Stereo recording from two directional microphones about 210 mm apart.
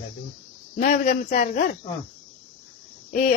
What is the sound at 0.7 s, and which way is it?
Speech, 35° left (ahead or behind).